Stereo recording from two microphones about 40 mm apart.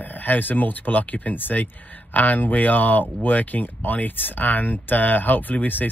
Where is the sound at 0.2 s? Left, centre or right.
Left.